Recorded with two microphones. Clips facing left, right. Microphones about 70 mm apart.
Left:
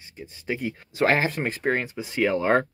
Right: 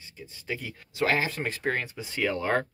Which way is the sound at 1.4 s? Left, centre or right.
Centre.